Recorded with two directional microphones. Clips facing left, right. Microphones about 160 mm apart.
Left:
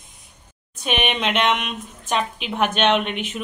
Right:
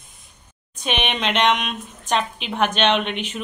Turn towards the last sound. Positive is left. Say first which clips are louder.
# left 1 dB
turn(degrees=5)  # may be behind; listen again after turning